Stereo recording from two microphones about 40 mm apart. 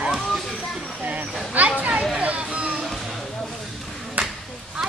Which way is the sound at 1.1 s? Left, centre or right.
Right.